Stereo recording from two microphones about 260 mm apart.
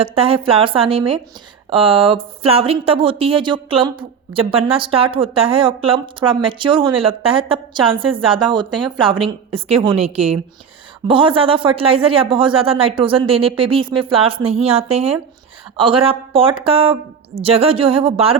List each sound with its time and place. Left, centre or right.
0.0 s a woman's voice: right